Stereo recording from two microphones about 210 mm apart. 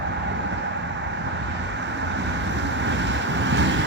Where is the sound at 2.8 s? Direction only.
60° right (ahead or behind).